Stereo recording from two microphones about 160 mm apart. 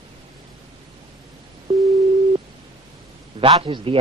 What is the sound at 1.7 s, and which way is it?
Busy signal, 35° right (ahead or behind).